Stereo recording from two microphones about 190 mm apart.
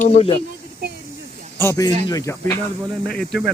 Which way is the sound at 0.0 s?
35° left (ahead or behind).